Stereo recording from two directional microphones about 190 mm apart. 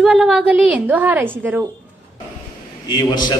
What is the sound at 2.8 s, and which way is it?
Speech, 20° left (ahead or behind).